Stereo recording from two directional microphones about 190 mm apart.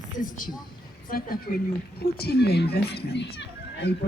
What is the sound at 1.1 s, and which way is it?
Speech, 50° left (ahead or behind).